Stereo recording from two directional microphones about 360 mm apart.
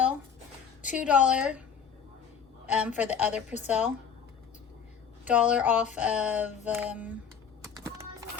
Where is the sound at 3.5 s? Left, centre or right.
Centre.